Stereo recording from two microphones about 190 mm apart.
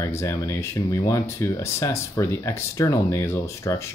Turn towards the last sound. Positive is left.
turn(degrees=15)  # may be behind; listen again after turning